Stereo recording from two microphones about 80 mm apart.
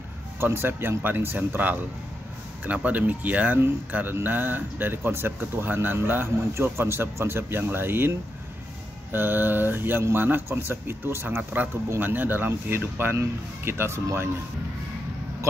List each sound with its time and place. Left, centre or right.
0.4 s speech: right